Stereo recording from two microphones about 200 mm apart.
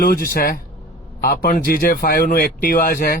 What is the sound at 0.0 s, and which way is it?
A man's voice, 45° left (ahead or behind).